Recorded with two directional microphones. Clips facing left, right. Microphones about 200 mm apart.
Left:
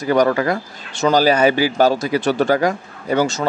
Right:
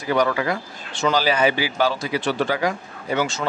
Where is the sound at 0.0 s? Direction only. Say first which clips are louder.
Left 5 dB; 45° left (ahead or behind).